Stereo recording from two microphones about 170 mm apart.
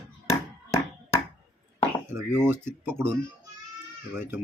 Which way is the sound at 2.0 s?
15° right (ahead or behind).